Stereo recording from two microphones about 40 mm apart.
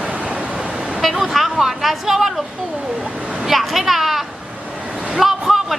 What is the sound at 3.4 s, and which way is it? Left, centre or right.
Speech, centre.